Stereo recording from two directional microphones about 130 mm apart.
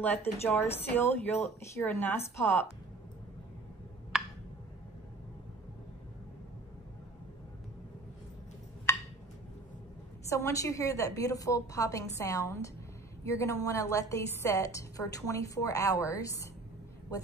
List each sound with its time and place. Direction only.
0.0 s a woman's voice: 15° left (ahead or behind)
8.9 s a sound: 20° left (ahead or behind)
10.3 s a woman's voice: 25° left (ahead or behind)